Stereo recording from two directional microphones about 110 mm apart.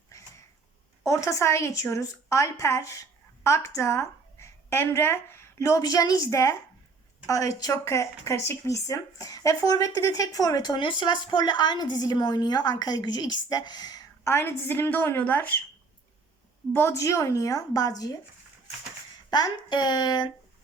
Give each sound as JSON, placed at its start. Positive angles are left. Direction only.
{"t": 1.0, "sound": "a woman's voice", "side_deg": 25}
{"t": 14.3, "sound": "a woman's voice", "side_deg": 20}
{"t": 16.7, "sound": "a woman's voice", "side_deg": 25}
{"t": 19.3, "sound": "speech", "side_deg": 40}